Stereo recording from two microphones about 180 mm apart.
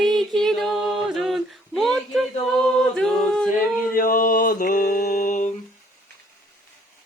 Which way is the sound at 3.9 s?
50° left (ahead or behind).